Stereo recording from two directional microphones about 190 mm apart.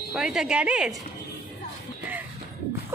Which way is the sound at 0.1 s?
5° right (ahead or behind).